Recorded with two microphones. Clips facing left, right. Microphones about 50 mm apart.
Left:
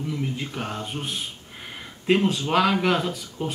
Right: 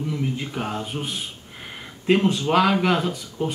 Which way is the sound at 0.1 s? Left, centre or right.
Centre.